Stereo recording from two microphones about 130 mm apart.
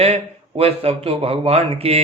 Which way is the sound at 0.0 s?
50° right (ahead or behind).